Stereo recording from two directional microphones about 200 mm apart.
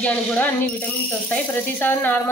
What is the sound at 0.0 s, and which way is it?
Speech, 5° left (ahead or behind).